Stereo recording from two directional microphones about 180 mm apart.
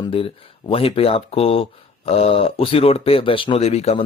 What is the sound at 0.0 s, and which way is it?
Speech, 30° left (ahead or behind).